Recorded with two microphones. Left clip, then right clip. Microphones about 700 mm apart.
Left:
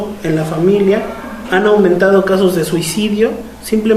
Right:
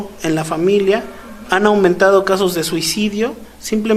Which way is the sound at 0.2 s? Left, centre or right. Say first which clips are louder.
Left 1 dB; right.